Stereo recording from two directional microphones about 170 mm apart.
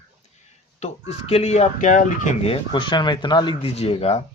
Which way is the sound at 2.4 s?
30° left (ahead or behind).